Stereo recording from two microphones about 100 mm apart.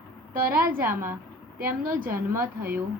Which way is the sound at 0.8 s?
25° right (ahead or behind).